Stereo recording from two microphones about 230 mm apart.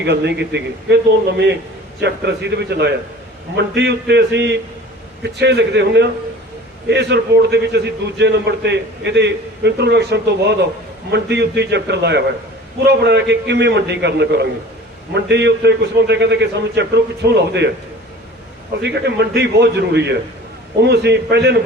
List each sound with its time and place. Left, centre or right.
0.0 s a man's voice: right
2.0 s a man's voice: right
18.8 s a man's voice: right